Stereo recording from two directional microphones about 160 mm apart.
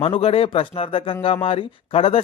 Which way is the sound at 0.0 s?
35° left (ahead or behind).